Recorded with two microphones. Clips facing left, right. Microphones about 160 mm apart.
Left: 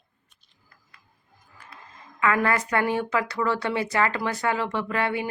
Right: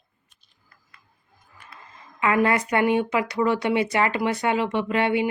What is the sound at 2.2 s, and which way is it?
Speech, 20° right (ahead or behind).